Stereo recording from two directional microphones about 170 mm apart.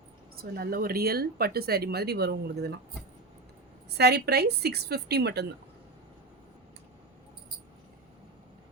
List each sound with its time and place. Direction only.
0.3 s speech: 60° right (ahead or behind)
3.8 s speech: 75° right (ahead or behind)